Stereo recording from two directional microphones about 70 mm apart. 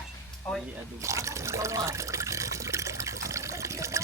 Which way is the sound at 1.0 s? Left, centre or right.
Right.